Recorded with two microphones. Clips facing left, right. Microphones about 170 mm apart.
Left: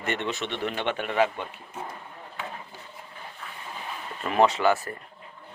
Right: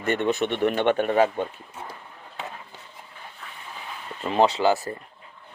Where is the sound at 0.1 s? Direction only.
55° right (ahead or behind).